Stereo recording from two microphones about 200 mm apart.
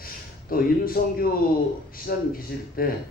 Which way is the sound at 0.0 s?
45° left (ahead or behind).